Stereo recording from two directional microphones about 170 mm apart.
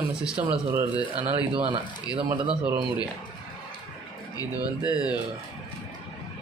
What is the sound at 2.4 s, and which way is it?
Speech, 5° right (ahead or behind).